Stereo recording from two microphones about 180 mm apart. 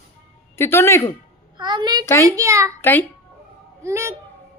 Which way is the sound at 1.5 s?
25° right (ahead or behind).